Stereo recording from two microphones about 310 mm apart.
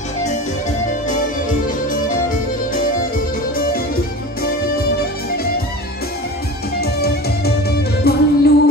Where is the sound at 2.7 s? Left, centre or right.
Left.